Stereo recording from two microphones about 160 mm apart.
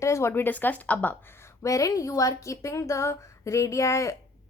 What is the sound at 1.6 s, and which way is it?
A woman's voice, 20° left (ahead or behind).